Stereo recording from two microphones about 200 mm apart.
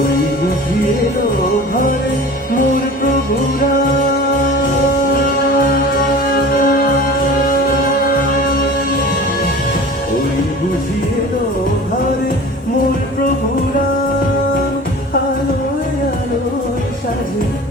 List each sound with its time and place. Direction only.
5.1 s music: 45° left (ahead or behind)